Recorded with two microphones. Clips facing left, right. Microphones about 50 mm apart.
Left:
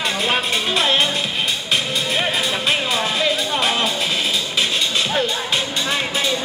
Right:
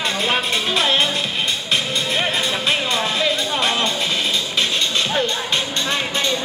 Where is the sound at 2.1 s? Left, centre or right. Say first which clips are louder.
Even; centre.